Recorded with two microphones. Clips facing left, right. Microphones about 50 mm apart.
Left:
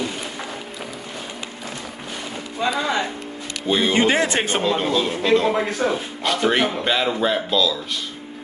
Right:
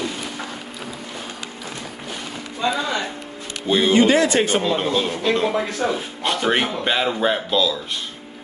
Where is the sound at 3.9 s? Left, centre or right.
Left.